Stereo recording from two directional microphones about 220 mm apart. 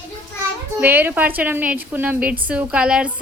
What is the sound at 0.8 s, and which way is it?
A woman's voice, 10° right (ahead or behind).